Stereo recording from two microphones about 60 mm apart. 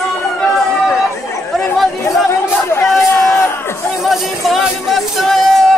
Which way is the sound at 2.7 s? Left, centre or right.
Left.